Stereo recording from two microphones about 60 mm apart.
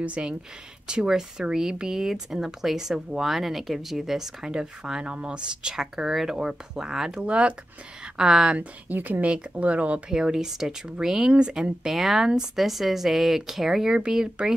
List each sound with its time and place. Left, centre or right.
0.0 s speech: centre
8.5 s speech: right
11.9 s speech: centre